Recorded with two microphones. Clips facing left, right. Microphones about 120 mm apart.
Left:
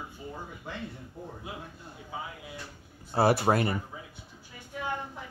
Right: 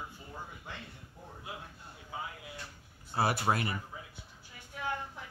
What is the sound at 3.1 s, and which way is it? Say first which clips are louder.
Speech: left 6 dB; 35° left (ahead or behind).